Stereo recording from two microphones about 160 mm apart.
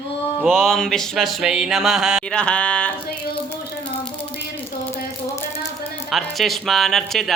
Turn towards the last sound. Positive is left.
turn(degrees=0)  # may be behind; listen again after turning